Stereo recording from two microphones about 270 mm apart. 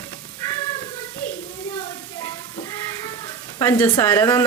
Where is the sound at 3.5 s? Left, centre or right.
Centre.